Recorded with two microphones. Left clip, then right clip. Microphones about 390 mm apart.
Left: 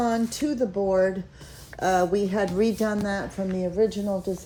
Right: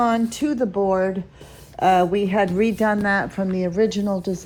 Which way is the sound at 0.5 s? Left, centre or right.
Right.